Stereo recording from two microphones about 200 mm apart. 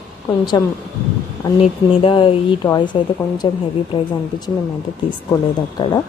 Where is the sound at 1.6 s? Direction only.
25° left (ahead or behind).